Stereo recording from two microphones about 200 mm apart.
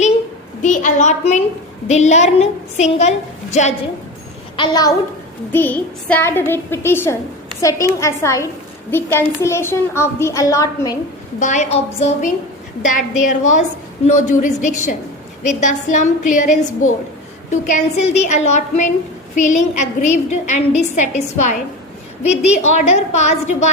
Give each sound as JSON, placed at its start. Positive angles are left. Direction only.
{"t": 0.6, "sound": "a child's voice", "side_deg": 40}
{"t": 4.5, "sound": "a woman's voice", "side_deg": 20}
{"t": 5.5, "sound": "a child's voice", "side_deg": 10}
{"t": 11.3, "sound": "a woman's voice", "side_deg": 35}